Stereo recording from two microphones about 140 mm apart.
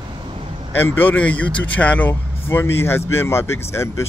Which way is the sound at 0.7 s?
15° left (ahead or behind).